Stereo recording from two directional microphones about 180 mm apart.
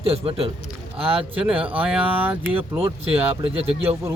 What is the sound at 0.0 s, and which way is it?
Speech, 35° right (ahead or behind).